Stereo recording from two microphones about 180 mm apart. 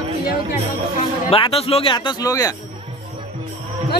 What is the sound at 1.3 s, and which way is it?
Speech, 30° left (ahead or behind).